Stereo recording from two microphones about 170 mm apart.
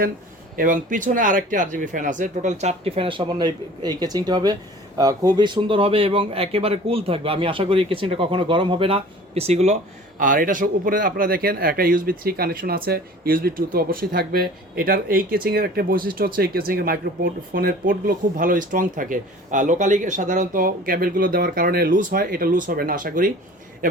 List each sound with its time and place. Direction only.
0.5 s speech: 55° right (ahead or behind)
10.2 s speech: 50° right (ahead or behind)